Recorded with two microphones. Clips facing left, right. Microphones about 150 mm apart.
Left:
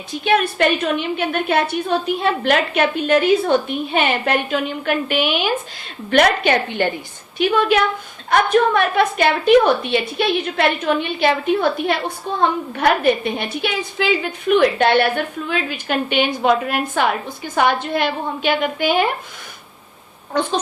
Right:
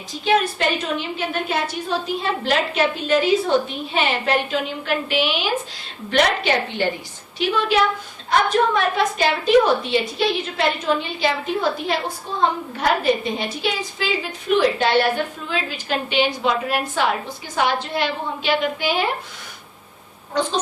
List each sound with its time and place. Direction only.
0.1 s a woman's voice: 60° left (ahead or behind)
12.4 s a woman's voice: 60° left (ahead or behind)